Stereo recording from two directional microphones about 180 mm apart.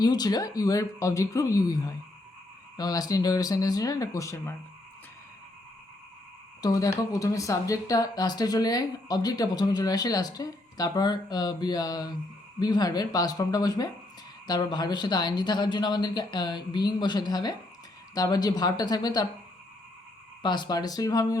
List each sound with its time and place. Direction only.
0.0 s speech: 20° left (ahead or behind)
6.6 s speech: 20° left (ahead or behind)
20.4 s speech: 25° left (ahead or behind)